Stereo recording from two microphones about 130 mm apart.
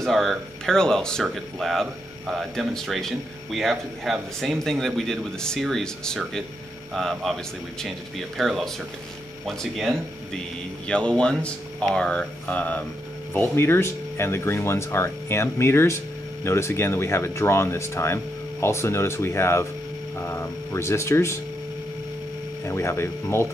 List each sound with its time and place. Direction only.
0.0 s speech: centre (ahead or behind); by 21.4 s 20° left (ahead or behind)
22.7 s speech: 20° left (ahead or behind)